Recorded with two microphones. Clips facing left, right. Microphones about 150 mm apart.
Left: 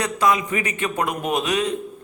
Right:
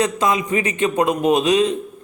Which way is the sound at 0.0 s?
20° right (ahead or behind).